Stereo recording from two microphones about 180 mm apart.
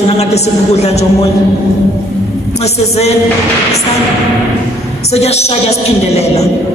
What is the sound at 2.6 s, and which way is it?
Speech, 35° left (ahead or behind).